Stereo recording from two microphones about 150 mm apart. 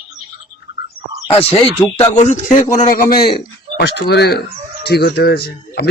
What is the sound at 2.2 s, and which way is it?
A man's voice, 55° left (ahead or behind).